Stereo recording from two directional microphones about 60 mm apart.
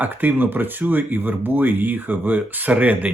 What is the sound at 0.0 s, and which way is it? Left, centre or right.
Speech, right.